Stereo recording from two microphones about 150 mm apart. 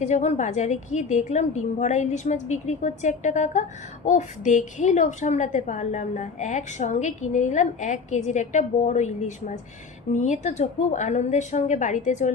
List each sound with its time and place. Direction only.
0.0 s a woman's voice: 50° left (ahead or behind)